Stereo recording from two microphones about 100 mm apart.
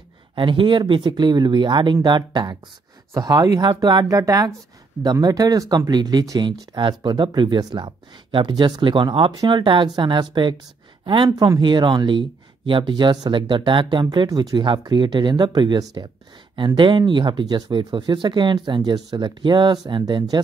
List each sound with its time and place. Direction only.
0.4 s speech: 55° right (ahead or behind)
4.2 s speech: 35° right (ahead or behind)
15.8 s speech: 40° right (ahead or behind)
16.5 s speech: 50° right (ahead or behind)